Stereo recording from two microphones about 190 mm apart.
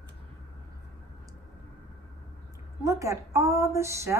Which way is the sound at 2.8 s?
15° right (ahead or behind).